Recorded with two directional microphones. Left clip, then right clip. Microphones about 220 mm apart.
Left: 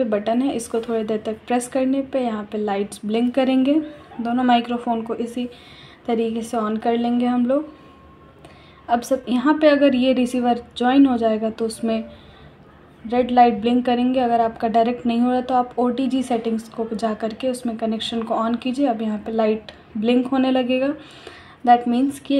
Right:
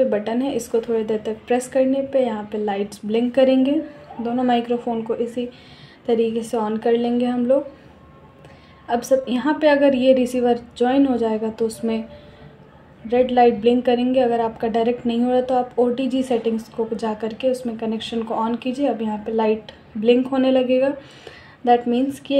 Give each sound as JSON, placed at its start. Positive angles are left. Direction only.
{"t": 0.1, "sound": "a woman's voice", "side_deg": 20}
{"t": 8.8, "sound": "a woman's voice", "side_deg": 15}
{"t": 13.1, "sound": "a woman's voice", "side_deg": 20}